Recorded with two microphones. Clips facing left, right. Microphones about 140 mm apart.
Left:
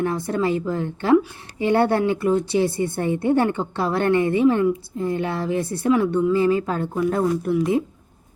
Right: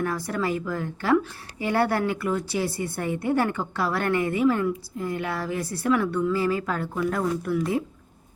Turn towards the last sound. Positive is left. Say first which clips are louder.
# left 5 dB
turn(degrees=20)  # may be behind; listen again after turning